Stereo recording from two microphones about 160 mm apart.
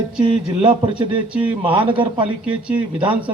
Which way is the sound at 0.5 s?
35° right (ahead or behind).